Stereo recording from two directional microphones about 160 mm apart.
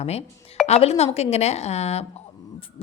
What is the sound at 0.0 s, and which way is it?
Speech, 40° left (ahead or behind).